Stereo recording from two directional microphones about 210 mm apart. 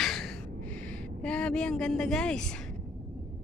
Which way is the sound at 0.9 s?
5° left (ahead or behind).